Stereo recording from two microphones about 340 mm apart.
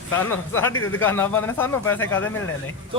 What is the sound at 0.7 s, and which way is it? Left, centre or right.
Speech, left.